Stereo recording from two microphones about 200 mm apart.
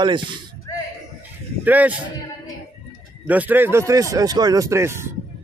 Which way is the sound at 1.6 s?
10° right (ahead or behind).